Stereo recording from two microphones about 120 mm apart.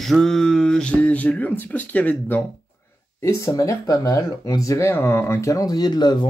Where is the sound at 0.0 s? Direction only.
Centre (ahead or behind).